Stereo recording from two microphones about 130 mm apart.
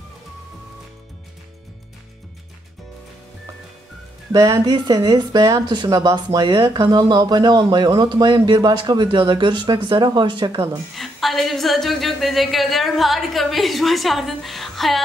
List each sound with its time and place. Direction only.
4.3 s speech: 25° right (ahead or behind)
11.0 s a woman's voice: centre (ahead or behind)